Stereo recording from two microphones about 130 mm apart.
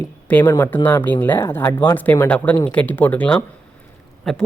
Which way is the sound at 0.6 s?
15° left (ahead or behind).